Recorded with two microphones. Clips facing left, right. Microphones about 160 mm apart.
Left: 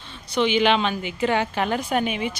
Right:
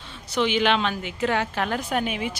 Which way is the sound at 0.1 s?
5° right (ahead or behind).